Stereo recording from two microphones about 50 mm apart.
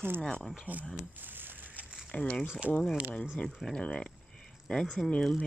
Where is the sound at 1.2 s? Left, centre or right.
Right.